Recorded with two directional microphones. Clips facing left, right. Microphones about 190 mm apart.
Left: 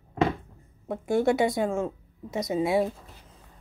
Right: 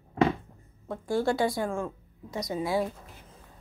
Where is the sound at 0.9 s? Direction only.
20° left (ahead or behind).